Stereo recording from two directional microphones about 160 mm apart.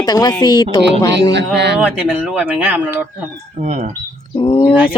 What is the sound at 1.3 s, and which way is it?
Speech, 90° right.